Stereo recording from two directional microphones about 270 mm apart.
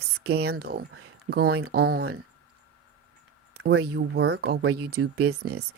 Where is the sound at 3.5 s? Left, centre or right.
Right.